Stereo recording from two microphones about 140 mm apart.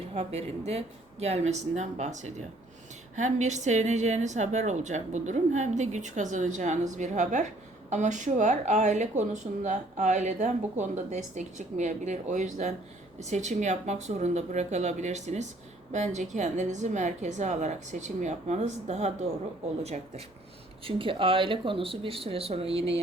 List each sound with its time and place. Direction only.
0.1 s speech: 50° right (ahead or behind)
20.8 s speech: 40° right (ahead or behind)